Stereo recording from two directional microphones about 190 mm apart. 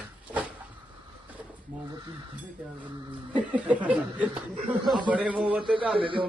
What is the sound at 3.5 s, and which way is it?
Speech, 10° right (ahead or behind).